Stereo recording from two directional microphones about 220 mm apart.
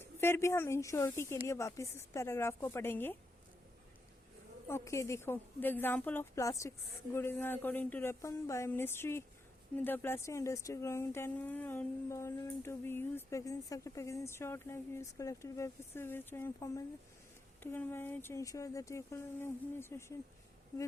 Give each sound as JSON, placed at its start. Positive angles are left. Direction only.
{"t": 0.0, "sound": "speech", "side_deg": 10}
{"t": 4.7, "sound": "speech", "side_deg": 10}